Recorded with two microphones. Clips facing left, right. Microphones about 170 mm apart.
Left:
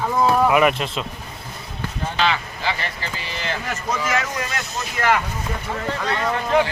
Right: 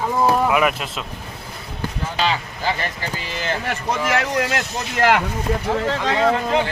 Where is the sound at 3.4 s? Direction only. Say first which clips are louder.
Right 3 dB; 60° right (ahead or behind).